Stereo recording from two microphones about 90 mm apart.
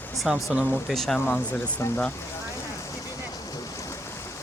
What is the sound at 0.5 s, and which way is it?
Speech, 10° right (ahead or behind).